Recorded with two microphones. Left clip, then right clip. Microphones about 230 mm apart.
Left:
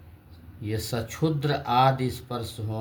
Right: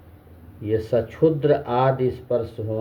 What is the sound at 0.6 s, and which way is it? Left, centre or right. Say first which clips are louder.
Speech: right 10 dB; centre.